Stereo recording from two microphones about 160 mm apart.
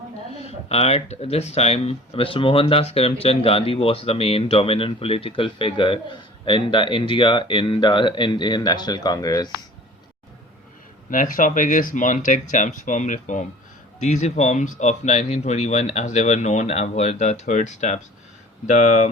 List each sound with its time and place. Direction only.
0.3 s speech: 40° left (ahead or behind); by 9.5 s 25° left (ahead or behind)
11.1 s speech: 55° left (ahead or behind)